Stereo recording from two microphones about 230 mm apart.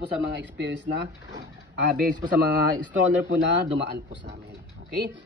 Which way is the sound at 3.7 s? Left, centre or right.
Right.